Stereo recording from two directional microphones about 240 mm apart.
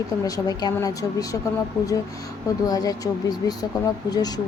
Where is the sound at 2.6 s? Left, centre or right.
Centre.